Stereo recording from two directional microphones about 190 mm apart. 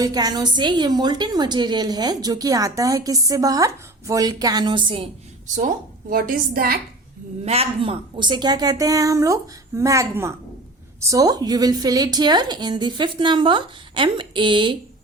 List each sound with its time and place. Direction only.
0.0 s a woman's voice: 20° right (ahead or behind)
5.5 s a woman's voice: 45° right (ahead or behind)
7.4 s a woman's voice: 30° right (ahead or behind)